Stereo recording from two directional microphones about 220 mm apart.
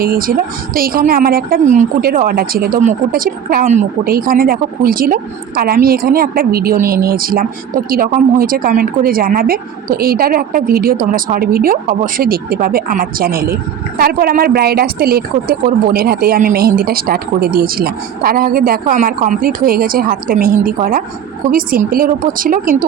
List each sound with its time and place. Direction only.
0.0 s a woman's voice: 40° right (ahead or behind)